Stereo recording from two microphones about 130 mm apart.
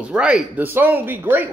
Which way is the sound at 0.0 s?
5° right (ahead or behind).